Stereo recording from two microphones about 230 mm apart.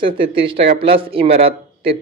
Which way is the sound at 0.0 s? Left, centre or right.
Right.